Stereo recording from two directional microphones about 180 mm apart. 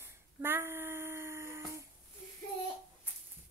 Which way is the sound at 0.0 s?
10° right (ahead or behind).